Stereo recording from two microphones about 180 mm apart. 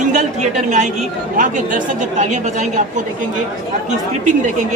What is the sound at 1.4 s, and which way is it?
Speech, 45° right (ahead or behind).